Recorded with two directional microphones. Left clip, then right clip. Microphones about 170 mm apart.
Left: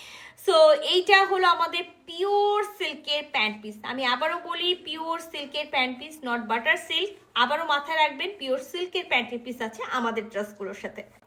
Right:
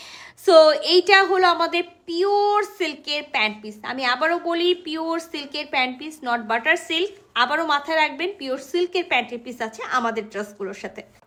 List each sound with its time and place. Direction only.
0.4 s a woman's voice: 45° right (ahead or behind)